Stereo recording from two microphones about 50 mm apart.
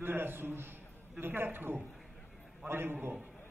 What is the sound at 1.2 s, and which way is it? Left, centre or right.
A man's voice, right.